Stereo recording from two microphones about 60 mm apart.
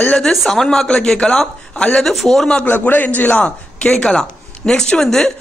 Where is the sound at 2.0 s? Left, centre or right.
Centre.